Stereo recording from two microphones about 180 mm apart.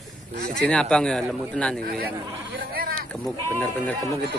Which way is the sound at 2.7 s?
55° right (ahead or behind).